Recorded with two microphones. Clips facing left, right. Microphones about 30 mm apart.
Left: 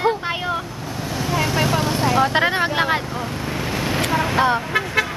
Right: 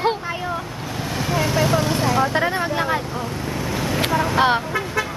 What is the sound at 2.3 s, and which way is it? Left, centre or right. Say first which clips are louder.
Speech: left 2 dB; left.